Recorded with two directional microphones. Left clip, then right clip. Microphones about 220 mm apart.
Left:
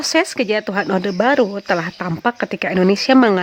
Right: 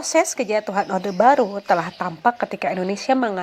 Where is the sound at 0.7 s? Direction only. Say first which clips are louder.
Left 3 dB; 35° left (ahead or behind).